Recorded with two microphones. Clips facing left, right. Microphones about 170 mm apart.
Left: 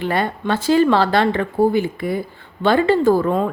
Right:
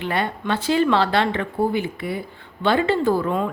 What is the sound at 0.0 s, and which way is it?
Speech, 40° left (ahead or behind).